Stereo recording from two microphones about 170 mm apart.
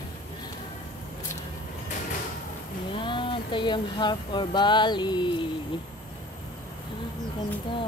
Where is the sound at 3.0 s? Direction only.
30° left (ahead or behind).